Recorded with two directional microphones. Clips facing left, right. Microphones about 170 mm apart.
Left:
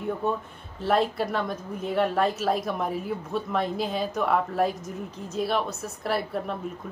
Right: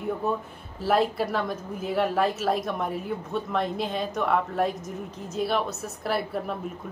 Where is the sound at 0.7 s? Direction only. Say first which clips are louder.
Even; centre (ahead or behind).